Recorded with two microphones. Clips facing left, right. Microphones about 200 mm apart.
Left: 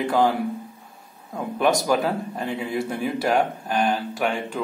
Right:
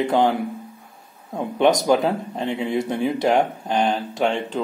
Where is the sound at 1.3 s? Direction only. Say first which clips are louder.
Right 3 dB; 25° right (ahead or behind).